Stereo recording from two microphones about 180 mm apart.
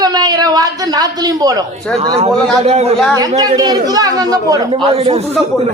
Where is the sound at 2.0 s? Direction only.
35° right (ahead or behind).